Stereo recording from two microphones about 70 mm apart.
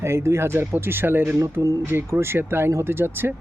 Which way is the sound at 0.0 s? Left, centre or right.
Right.